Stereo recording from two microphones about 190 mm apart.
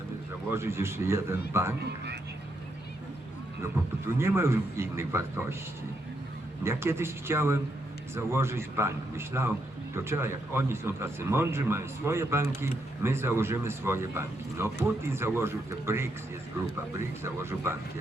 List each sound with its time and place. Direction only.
0.5 s speech: 15° right (ahead or behind)
3.6 s speech: 15° right (ahead or behind)
6.7 s speech: 15° right (ahead or behind)
17.2 s speech: 15° right (ahead or behind)